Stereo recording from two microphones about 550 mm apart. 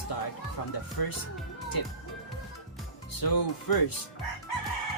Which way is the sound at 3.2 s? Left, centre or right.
Left.